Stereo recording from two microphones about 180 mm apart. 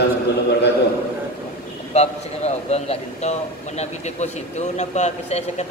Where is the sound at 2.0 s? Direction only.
35° left (ahead or behind).